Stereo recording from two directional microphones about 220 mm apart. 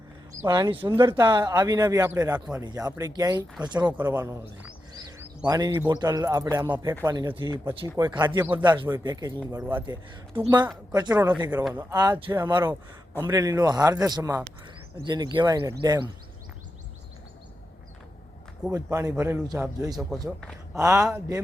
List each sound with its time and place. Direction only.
0.4 s speech: 15° right (ahead or behind)
3.9 s speech: 10° right (ahead or behind)
4.9 s a sound: 15° right (ahead or behind)
5.9 s speech: 15° right (ahead or behind)
18.7 s speech: 15° right (ahead or behind)